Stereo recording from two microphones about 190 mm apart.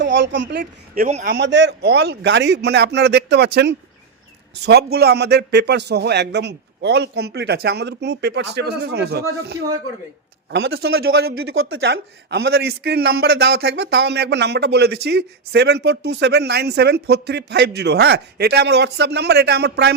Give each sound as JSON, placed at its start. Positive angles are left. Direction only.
{"t": 0.0, "sound": "a woman's voice", "side_deg": -70}
{"t": 0.6, "sound": "a woman's voice", "side_deg": -45}
{"t": 1.2, "sound": "a man's voice", "side_deg": -60}